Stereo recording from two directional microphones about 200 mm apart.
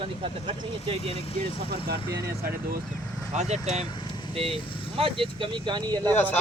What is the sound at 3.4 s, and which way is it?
Speech, 35° right (ahead or behind).